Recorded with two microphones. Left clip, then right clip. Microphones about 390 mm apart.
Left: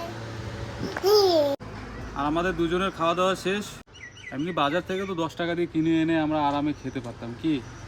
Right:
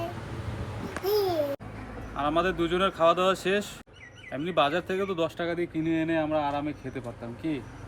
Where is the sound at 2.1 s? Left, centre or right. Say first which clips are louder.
Even; centre.